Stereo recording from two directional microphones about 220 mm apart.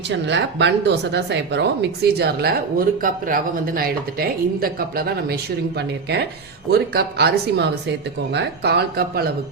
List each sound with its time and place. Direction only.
0.1 s a woman's voice: 55° right (ahead or behind)